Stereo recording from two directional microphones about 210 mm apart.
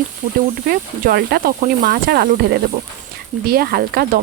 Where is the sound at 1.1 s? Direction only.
45° right (ahead or behind).